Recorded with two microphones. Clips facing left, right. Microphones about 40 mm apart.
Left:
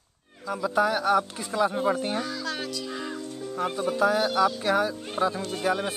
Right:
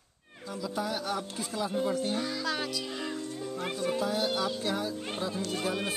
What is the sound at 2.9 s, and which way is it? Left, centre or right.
Speech, centre.